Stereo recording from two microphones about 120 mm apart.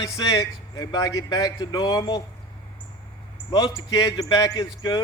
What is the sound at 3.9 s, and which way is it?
Speech, 35° left (ahead or behind).